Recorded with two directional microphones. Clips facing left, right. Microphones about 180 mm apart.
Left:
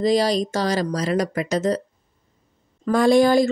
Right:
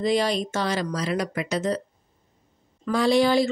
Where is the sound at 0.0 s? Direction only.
40° left (ahead or behind).